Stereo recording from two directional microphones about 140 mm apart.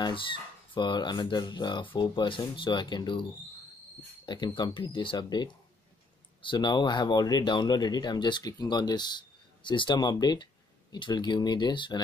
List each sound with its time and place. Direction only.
0.0 s speech: 35° left (ahead or behind)
4.3 s speech: 35° left (ahead or behind)